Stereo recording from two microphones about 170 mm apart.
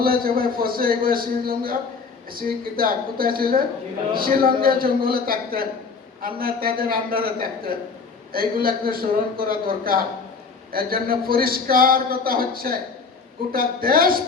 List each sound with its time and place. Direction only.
0.0 s speech: 60° right (ahead or behind)